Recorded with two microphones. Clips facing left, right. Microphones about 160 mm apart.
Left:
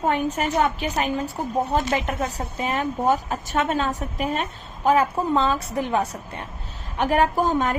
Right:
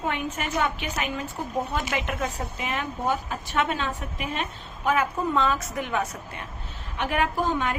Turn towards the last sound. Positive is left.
turn(degrees=40)  # may be behind; listen again after turning